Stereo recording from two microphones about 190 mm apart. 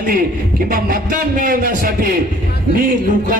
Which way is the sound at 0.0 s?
50° right (ahead or behind).